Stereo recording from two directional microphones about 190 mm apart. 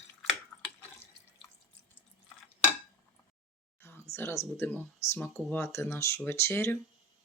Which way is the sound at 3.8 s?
10° left (ahead or behind).